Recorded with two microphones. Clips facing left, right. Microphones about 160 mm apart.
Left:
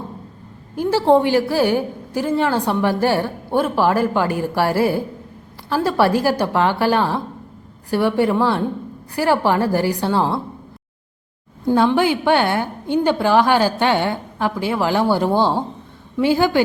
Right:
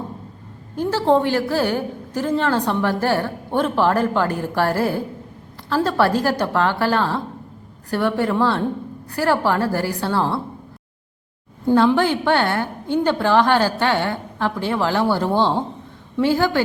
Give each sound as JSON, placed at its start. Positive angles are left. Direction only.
{"t": 0.8, "sound": "a woman's voice", "side_deg": 10}
{"t": 11.9, "sound": "a woman's voice", "side_deg": 10}